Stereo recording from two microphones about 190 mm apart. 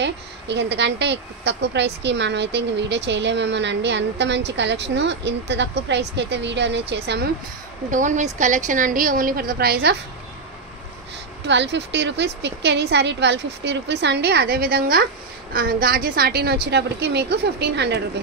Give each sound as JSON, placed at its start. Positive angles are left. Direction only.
{"t": 0.0, "sound": "a woman's voice", "side_deg": -65}
{"t": 7.9, "sound": "a woman's voice", "side_deg": -40}
{"t": 11.4, "sound": "a woman's voice", "side_deg": -65}